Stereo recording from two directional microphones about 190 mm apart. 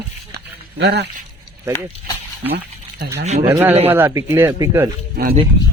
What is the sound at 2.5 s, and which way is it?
Liquid, 60° right (ahead or behind).